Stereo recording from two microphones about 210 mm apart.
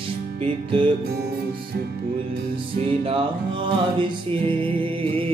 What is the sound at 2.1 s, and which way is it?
Music, 25° right (ahead or behind).